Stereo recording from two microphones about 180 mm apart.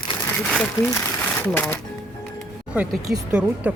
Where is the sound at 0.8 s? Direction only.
10° left (ahead or behind).